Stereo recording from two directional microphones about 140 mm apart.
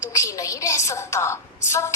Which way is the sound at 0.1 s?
25° left (ahead or behind).